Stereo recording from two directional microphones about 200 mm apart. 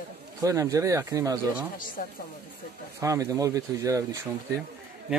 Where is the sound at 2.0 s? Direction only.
45° left (ahead or behind).